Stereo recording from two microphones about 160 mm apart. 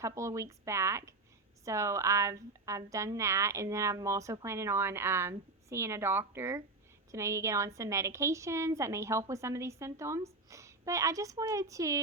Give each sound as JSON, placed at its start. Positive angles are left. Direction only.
{"t": 0.0, "sound": "a woman's voice", "side_deg": -20}